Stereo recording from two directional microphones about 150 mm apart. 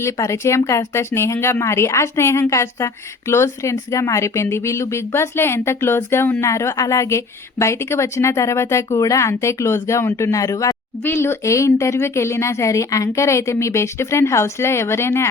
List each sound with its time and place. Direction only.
0.0 s speech: 20° left (ahead or behind)